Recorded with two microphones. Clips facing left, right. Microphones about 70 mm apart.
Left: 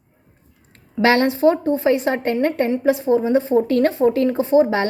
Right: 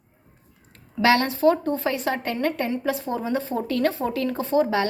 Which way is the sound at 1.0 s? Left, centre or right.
Left.